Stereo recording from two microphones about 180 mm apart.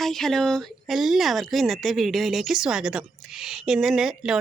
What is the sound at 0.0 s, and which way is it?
Speech, centre (ahead or behind).